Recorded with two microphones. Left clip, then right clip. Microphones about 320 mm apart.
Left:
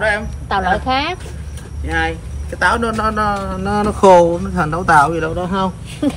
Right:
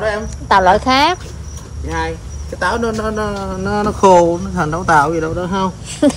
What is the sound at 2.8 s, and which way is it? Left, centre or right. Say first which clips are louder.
Speech: left 2 dB; left.